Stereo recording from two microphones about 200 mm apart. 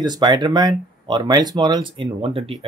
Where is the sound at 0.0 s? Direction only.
20° right (ahead or behind).